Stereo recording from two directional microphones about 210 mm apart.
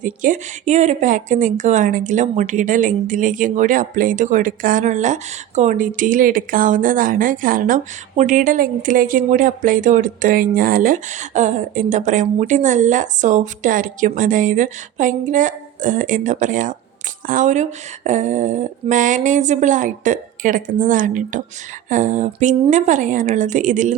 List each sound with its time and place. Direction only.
0.0 s speech: 35° right (ahead or behind)